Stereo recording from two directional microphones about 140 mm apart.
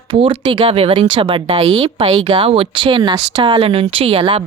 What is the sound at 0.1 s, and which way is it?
Speech, 35° right (ahead or behind).